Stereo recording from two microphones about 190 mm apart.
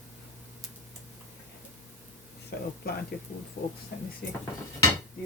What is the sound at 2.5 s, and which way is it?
Speech, 55° left (ahead or behind).